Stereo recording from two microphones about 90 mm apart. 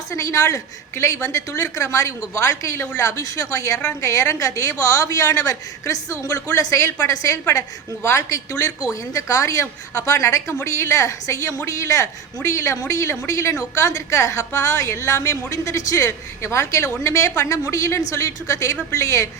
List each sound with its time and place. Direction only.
0.1 s a woman's voice: 35° left (ahead or behind)